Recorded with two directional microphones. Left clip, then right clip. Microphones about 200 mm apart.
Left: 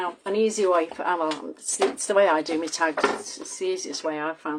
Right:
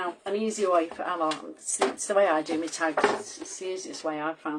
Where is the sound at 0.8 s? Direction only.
35° left (ahead or behind).